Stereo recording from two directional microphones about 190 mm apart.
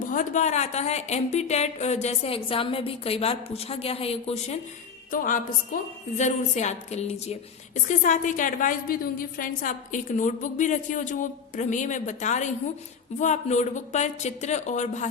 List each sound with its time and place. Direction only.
0.0 s speech: 40° left (ahead or behind)
5.1 s speech: 45° left (ahead or behind)